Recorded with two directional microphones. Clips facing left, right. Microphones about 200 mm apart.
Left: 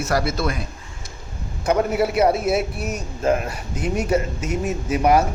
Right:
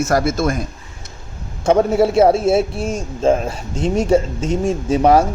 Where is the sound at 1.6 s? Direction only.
25° right (ahead or behind).